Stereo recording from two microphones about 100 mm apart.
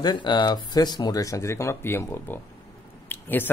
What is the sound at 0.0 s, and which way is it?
Speech, 45° left (ahead or behind).